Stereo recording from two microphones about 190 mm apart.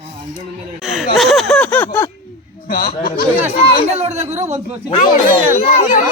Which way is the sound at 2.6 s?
50° left (ahead or behind).